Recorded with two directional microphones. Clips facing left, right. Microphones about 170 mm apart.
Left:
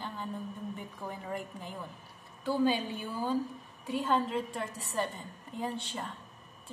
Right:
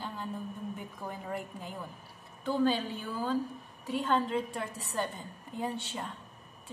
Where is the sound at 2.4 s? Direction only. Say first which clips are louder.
Even; 15° left (ahead or behind).